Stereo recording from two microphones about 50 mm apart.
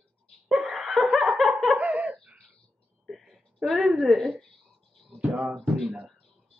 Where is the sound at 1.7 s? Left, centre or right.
Right.